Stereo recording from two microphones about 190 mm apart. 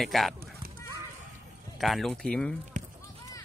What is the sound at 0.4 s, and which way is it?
Fowl, 50° right (ahead or behind).